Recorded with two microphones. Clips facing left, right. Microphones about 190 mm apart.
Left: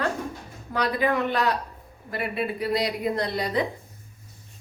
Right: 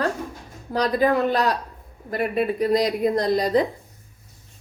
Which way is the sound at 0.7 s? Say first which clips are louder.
Right 4 dB; 35° right (ahead or behind).